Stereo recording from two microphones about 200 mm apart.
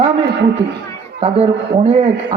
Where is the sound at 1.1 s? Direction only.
30° right (ahead or behind).